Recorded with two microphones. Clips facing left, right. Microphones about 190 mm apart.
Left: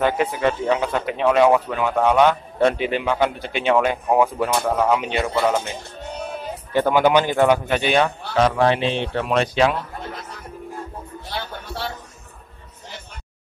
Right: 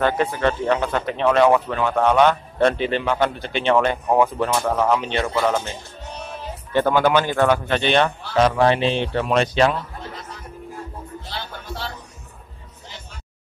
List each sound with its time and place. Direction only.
0.0 s speech: 15° left (ahead or behind)
6.7 s speech: 15° left (ahead or behind)
11.2 s music: 60° left (ahead or behind)